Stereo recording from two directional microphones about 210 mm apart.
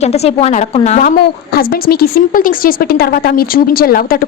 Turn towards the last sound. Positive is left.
turn(degrees=45)  # may be behind; listen again after turning